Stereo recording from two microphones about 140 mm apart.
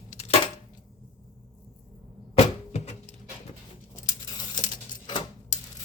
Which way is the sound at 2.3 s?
50° left (ahead or behind).